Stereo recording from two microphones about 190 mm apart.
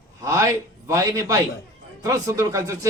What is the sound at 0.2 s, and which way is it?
A man's voice, 15° right (ahead or behind).